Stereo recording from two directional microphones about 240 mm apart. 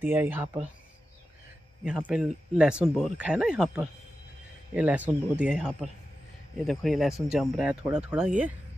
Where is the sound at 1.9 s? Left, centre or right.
Centre.